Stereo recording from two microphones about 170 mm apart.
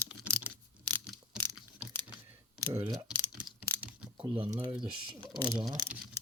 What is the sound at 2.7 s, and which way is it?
Speech, 25° right (ahead or behind).